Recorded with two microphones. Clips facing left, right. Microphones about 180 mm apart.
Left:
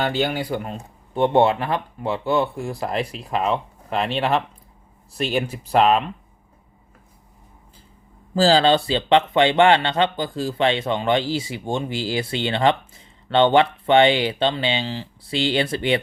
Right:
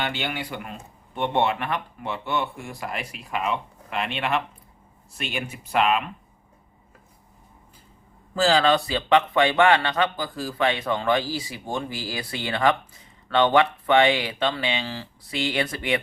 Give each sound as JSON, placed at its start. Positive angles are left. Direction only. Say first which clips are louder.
{"t": 0.0, "sound": "speech", "louder": "left 7 dB", "side_deg": 40}
{"t": 8.4, "sound": "speech", "louder": "left 4 dB", "side_deg": 30}